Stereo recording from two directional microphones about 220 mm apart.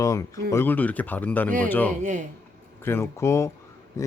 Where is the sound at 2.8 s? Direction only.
10° left (ahead or behind).